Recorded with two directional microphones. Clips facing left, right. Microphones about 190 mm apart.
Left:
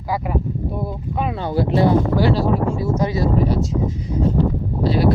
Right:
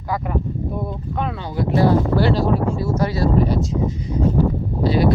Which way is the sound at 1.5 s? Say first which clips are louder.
Even; 25° left (ahead or behind).